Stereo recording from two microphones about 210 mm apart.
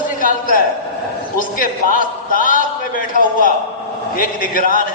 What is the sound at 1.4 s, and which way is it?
A man's voice, 40° left (ahead or behind).